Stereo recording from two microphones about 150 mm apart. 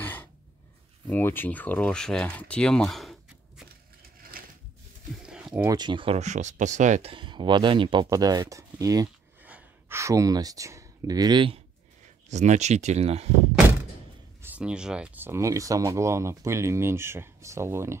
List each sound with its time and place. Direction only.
0.0 s a sound: 10° left (ahead or behind)
1.0 s speech: 15° left (ahead or behind)
4.4 s a sound: 70° right (ahead or behind)
5.2 s a sound: 5° right (ahead or behind)
5.7 s speech: 30° right (ahead or behind); by 7.1 s 55° right (ahead or behind)
7.1 s speech: 30° right (ahead or behind)
9.4 s speech: 10° right (ahead or behind); by 11.6 s 35° right (ahead or behind)
12.3 s speech: 50° right (ahead or behind)
14.4 s speech: 10° right (ahead or behind)